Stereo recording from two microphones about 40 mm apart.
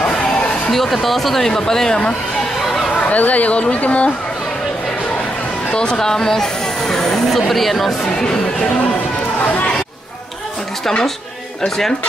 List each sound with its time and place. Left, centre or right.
0.7 s speech: centre
3.0 s speech: left
5.7 s speech: left; by 7.9 s centre